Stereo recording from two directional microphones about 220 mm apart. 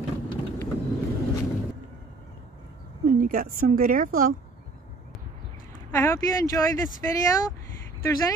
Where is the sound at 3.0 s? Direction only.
40° right (ahead or behind).